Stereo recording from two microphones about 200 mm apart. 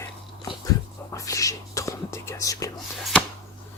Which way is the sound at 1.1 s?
15° left (ahead or behind).